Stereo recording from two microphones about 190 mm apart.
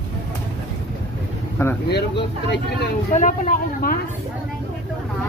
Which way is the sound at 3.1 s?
40° left (ahead or behind).